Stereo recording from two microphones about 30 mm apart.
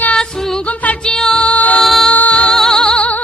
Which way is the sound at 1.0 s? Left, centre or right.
Left.